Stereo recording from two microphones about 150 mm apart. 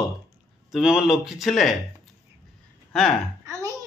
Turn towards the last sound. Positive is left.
turn(degrees=-20)  # may be behind; listen again after turning